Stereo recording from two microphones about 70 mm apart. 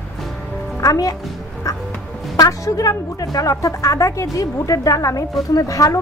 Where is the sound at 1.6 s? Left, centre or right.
Left.